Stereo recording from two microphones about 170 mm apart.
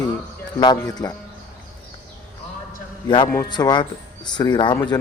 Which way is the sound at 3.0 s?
30° left (ahead or behind).